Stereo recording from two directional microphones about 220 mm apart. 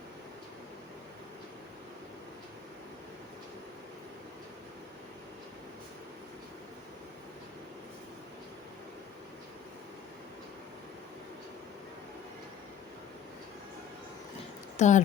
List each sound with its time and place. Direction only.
14.8 s speech: 35° left (ahead or behind)